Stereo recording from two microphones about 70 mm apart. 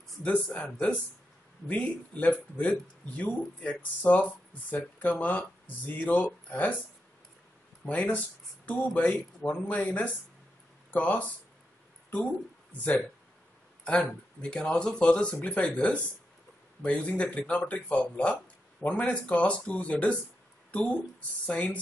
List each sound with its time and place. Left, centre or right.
0.2 s speech: centre
7.8 s speech: centre
13.8 s speech: centre